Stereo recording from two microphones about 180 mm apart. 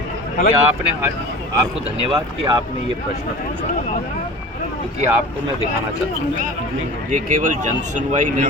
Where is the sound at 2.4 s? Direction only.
30° right (ahead or behind).